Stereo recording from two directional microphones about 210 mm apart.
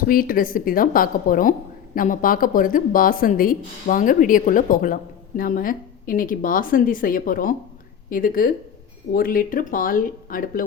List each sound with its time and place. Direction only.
0.1 s a woman's voice: 40° left (ahead or behind)